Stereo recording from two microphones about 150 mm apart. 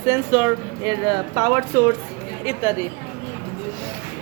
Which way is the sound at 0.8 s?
30° right (ahead or behind).